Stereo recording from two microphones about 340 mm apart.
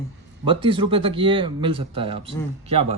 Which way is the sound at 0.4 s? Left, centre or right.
Centre.